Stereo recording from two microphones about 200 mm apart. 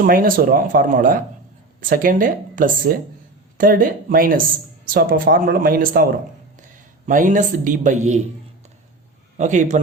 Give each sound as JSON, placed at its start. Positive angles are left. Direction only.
{"t": 0.0, "sound": "speech", "side_deg": -45}
{"t": 9.4, "sound": "speech", "side_deg": -35}